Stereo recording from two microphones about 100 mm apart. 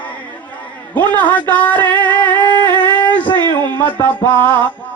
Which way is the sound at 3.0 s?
15° left (ahead or behind).